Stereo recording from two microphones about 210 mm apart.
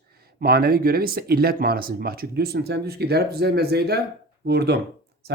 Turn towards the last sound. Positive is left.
turn(degrees=-50)  # may be behind; listen again after turning